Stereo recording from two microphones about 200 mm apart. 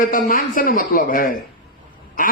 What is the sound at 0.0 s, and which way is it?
A man's voice, 45° left (ahead or behind).